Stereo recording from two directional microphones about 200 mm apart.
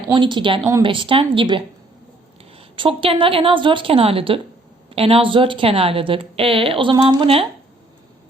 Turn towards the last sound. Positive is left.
turn(degrees=-25)  # may be behind; listen again after turning